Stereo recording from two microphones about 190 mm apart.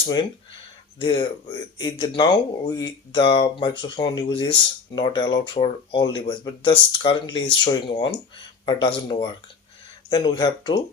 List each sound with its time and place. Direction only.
0.0 s speech: 25° left (ahead or behind)